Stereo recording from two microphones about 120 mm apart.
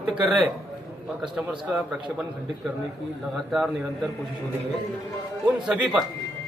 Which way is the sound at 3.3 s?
Centre (ahead or behind).